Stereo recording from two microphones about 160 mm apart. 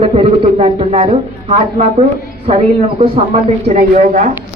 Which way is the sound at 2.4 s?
40° right (ahead or behind).